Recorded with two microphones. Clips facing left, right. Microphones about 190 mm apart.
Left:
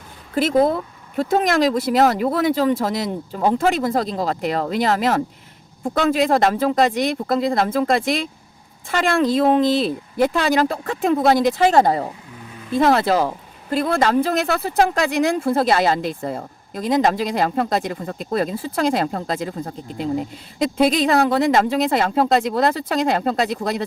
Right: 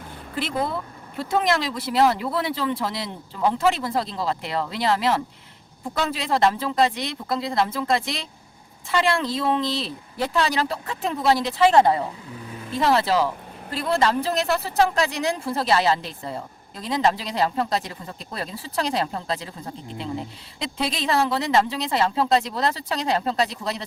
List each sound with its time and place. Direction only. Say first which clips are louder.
0.3 s speech: left 10 dB; 45° left (ahead or behind)
12.7 s speech: left 4 dB; 50° left (ahead or behind)